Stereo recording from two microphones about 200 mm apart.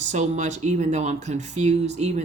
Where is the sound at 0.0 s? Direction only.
35° right (ahead or behind).